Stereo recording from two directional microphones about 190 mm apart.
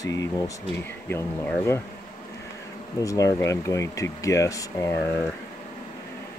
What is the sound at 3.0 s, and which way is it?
Speech, 15° left (ahead or behind).